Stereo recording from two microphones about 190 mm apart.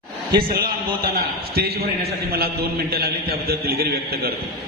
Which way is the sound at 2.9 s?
55° right (ahead or behind).